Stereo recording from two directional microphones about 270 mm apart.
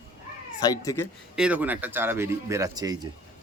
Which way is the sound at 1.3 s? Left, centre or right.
Centre.